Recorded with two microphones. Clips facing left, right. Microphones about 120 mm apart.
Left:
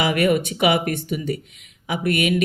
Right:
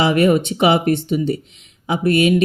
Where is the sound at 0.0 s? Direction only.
30° right (ahead or behind).